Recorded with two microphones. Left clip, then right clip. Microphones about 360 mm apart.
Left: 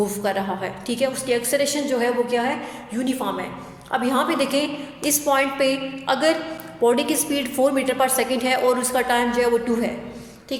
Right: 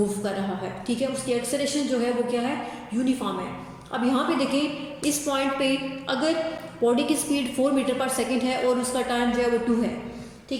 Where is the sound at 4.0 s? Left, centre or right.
Centre.